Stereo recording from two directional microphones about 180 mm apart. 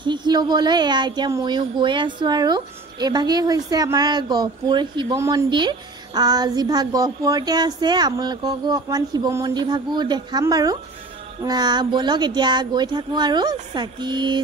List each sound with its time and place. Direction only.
0.0 s a woman's voice: 25° right (ahead or behind)